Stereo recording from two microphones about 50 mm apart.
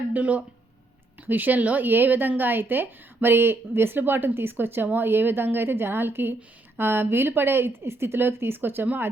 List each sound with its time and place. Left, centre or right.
0.1 s speech: right